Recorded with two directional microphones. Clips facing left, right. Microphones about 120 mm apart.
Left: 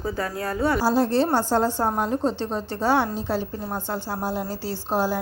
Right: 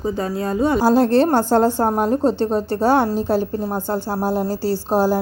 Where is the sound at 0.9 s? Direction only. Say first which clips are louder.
Right 7 dB; 60° right (ahead or behind); by 5.2 s 40° right (ahead or behind).